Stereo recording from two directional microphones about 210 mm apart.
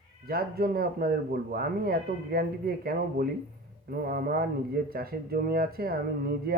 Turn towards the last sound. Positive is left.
turn(degrees=-45)  # may be behind; listen again after turning